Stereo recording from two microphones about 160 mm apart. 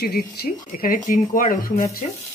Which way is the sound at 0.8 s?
60° left (ahead or behind).